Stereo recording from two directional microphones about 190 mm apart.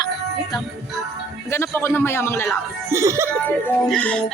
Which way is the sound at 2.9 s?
15° right (ahead or behind).